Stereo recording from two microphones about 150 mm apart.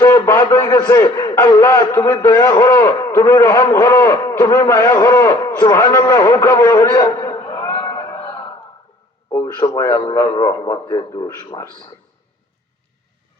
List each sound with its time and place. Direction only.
0.0 s a man's voice: 15° left (ahead or behind)
9.3 s a man's voice: 20° left (ahead or behind)